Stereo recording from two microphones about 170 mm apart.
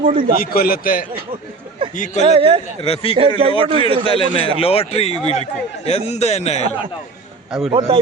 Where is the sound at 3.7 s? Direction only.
30° right (ahead or behind).